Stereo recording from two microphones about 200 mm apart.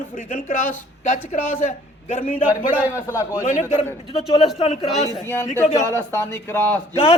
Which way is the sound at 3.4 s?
40° left (ahead or behind).